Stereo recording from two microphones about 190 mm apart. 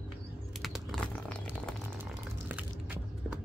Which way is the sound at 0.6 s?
Centre (ahead or behind).